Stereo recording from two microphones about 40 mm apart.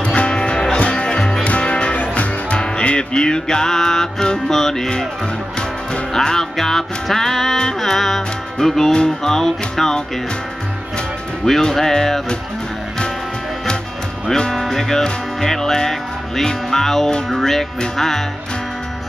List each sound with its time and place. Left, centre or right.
0.0 s music: left
6.1 s music: centre
11.7 s music: centre
14.5 s music: centre